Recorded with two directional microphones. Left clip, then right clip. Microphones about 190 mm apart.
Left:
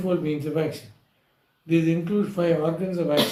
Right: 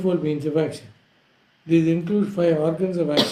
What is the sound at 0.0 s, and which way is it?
Speech, 30° right (ahead or behind).